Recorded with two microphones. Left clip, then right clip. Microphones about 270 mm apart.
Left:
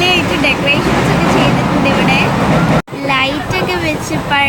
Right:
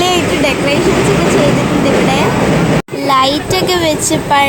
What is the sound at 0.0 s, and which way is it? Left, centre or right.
Vehicle, centre.